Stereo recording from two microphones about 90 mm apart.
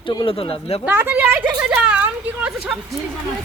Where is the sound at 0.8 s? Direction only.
25° right (ahead or behind).